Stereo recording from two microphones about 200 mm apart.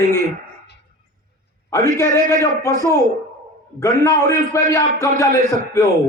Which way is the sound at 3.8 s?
15° left (ahead or behind).